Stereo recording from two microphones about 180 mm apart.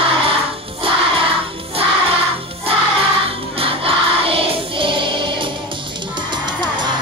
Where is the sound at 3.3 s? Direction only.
30° right (ahead or behind).